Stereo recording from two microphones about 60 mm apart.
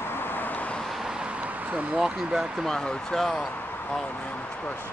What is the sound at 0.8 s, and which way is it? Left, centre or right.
Vehicle, centre.